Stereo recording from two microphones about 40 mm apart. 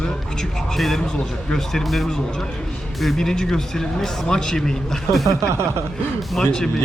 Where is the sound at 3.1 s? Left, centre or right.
Centre.